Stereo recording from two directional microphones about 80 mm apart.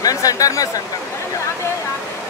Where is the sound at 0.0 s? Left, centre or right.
Left.